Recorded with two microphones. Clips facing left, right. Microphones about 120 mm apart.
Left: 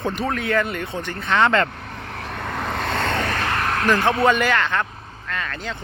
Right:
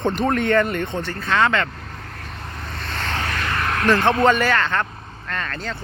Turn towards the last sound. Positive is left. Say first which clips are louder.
# right 1 dB
turn(degrees=15)  # may be behind; listen again after turning